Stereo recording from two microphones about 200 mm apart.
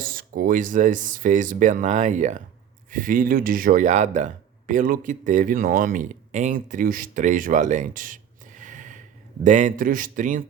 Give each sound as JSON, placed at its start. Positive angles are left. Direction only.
{"t": 0.0, "sound": "speech", "side_deg": -45}